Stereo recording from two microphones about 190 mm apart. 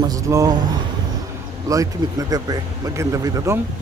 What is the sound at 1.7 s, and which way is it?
Speech, 20° right (ahead or behind).